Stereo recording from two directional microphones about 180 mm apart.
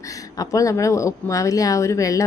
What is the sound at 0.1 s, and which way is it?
Speech, 20° left (ahead or behind).